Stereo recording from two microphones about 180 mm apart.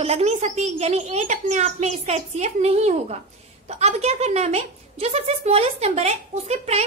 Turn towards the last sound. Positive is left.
turn(degrees=-35)  # may be behind; listen again after turning